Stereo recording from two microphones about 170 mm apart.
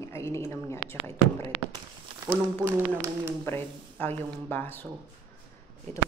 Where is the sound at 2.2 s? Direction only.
15° right (ahead or behind).